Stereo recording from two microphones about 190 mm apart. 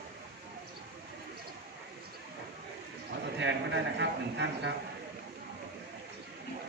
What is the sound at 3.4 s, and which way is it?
A man's voice, 70° right (ahead or behind).